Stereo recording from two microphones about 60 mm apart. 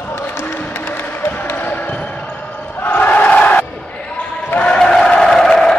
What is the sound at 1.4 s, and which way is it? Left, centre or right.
Basketball bounce, left.